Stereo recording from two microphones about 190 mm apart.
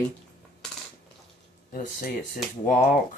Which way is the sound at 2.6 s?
40° left (ahead or behind).